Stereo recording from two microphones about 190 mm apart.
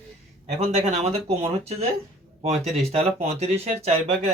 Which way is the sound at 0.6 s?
35° right (ahead or behind).